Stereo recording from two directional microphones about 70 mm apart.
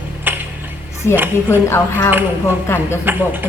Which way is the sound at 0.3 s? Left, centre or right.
Right.